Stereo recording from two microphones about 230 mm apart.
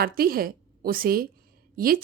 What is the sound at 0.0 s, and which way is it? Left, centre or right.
A woman's voice, right.